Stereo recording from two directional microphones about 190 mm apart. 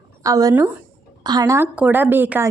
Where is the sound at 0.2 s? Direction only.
20° right (ahead or behind).